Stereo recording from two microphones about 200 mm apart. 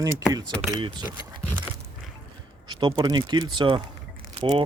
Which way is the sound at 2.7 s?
20° right (ahead or behind).